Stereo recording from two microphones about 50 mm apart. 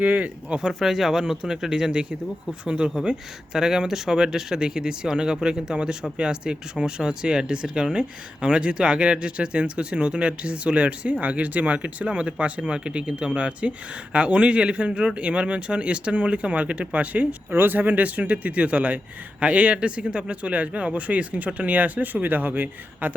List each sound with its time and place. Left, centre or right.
0.0 s speech: right
0.6 s speech: centre; by 17.2 s right
17.5 s speech: right